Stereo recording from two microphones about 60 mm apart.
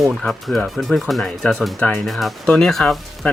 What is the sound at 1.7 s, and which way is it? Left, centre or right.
Speech, centre.